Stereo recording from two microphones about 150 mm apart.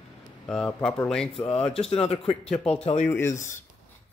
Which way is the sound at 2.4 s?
5° left (ahead or behind).